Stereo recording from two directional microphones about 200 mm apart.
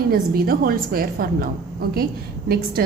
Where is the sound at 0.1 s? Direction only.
50° right (ahead or behind).